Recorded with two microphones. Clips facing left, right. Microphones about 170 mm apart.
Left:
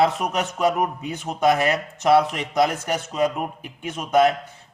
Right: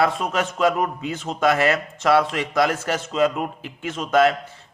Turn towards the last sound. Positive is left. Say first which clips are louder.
# even
turn(degrees=15)  # may be behind; listen again after turning